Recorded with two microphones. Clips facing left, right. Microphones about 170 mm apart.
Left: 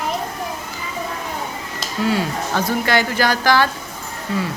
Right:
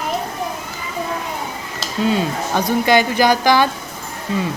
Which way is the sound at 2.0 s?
20° right (ahead or behind).